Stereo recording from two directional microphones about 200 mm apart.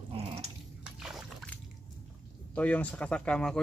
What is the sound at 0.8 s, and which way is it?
Boat, 5° right (ahead or behind).